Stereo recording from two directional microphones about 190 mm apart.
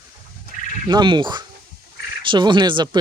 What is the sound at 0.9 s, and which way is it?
Speech, 25° right (ahead or behind).